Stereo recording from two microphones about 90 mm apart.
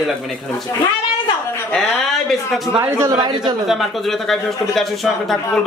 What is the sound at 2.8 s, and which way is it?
Speech, 25° right (ahead or behind).